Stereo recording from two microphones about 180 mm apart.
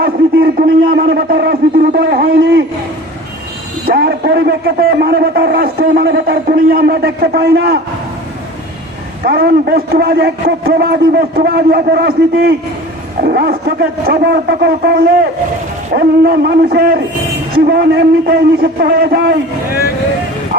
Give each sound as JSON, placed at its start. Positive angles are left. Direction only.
{"t": 0.9, "sound": "a man's voice", "side_deg": -60}
{"t": 3.8, "sound": "a man's voice", "side_deg": -60}
{"t": 9.2, "sound": "a man's voice", "side_deg": -65}